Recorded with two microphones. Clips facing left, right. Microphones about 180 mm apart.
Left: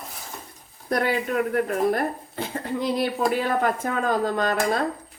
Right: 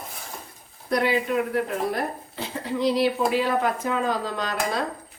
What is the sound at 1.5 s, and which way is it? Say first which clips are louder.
Speech: left 3 dB; 50° left (ahead or behind).